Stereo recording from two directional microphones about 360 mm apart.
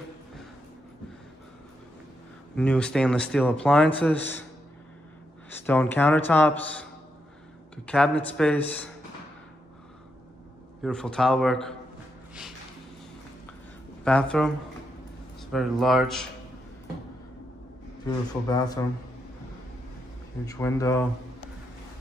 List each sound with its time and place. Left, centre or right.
2.5 s speech: centre
5.5 s speech: centre
10.8 s speech: centre
14.0 s speech: centre
15.8 s speech: centre
18.0 s speech: centre
20.4 s speech: centre